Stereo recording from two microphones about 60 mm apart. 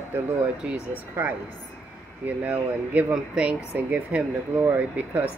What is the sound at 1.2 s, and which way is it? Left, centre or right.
Speech, right.